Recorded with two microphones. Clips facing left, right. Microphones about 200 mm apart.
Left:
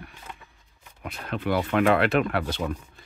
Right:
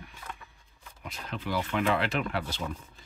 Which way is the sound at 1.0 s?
60° left (ahead or behind).